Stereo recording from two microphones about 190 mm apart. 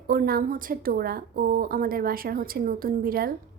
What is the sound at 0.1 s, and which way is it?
A woman's voice, 50° right (ahead or behind).